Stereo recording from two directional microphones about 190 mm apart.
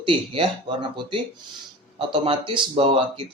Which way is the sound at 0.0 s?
25° right (ahead or behind).